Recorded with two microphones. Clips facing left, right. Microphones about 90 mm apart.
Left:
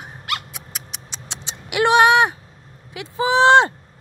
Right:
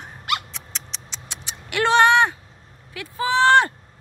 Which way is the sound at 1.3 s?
25° left (ahead or behind).